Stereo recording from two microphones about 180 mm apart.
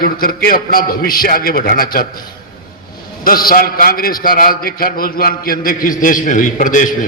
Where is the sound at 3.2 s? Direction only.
55° left (ahead or behind).